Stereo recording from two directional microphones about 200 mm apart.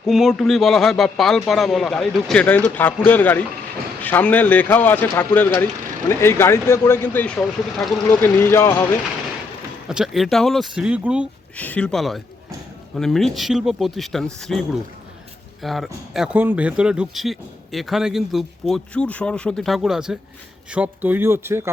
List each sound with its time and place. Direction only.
0.0 s speech: centre (ahead or behind)
9.9 s speech: centre (ahead or behind)
11.5 s a man's voice: 5° left (ahead or behind); by 21.7 s 10° right (ahead or behind)